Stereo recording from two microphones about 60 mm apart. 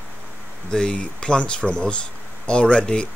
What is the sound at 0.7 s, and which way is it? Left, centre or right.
Speech, centre.